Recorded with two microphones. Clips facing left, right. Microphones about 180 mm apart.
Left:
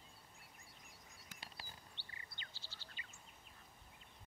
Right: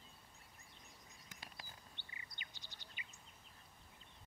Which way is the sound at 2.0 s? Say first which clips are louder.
Even; 15° right (ahead or behind).